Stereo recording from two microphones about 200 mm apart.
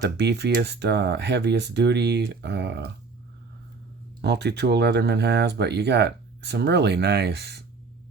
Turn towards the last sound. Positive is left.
turn(degrees=-55)  # may be behind; listen again after turning